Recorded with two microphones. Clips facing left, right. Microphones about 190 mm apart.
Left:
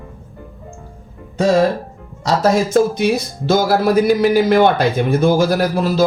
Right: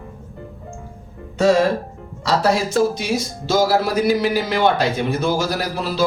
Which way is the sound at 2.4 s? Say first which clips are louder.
Left 4 dB; 55° left (ahead or behind).